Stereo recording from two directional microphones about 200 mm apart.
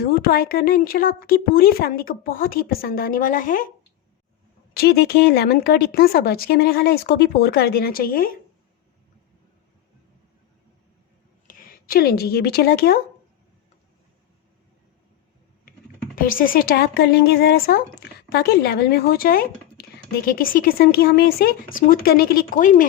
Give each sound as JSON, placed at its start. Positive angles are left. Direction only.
{"t": 0.0, "sound": "speech", "side_deg": 50}
{"t": 4.7, "sound": "speech", "side_deg": 50}
{"t": 11.4, "sound": "speech", "side_deg": 45}
{"t": 16.1, "sound": "speech", "side_deg": 45}